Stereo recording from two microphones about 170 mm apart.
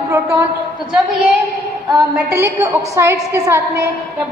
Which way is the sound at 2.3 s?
15° right (ahead or behind).